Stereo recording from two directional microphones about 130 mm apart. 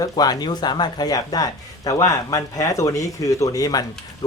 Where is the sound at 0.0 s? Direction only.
30° left (ahead or behind).